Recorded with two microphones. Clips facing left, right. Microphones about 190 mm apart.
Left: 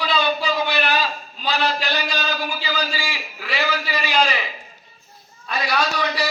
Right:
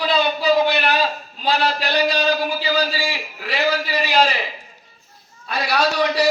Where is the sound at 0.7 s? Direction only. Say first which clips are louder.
Right 3 dB; 55° right (ahead or behind).